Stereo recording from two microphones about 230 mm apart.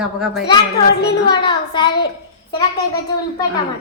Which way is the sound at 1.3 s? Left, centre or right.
Centre.